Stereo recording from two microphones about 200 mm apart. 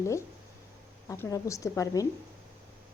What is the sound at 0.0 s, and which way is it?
A woman's voice, 15° left (ahead or behind).